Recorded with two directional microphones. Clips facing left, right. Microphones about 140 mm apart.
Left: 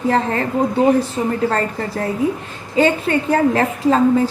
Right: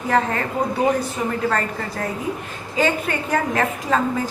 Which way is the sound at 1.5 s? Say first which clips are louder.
Left 3 dB; 30° left (ahead or behind).